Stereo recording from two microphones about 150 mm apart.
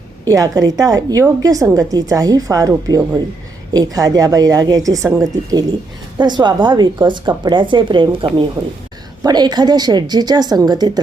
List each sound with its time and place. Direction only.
0.3 s a woman's voice: 25° right (ahead or behind)